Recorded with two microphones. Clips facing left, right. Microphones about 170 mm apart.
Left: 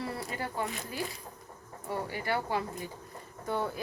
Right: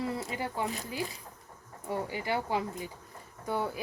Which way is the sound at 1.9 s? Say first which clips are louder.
Right 1 dB; 15° right (ahead or behind).